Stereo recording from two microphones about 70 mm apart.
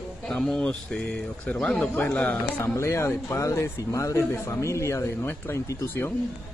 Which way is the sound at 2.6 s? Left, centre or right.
Left.